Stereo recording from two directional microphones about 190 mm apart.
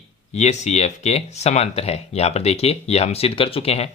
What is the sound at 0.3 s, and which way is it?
Speech, 35° left (ahead or behind).